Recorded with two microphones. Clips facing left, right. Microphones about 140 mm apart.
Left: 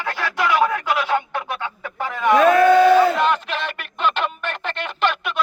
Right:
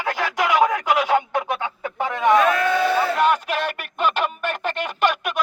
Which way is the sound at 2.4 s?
40° left (ahead or behind).